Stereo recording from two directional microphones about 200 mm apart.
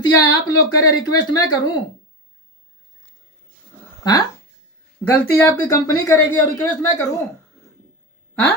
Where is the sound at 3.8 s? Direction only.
20° left (ahead or behind).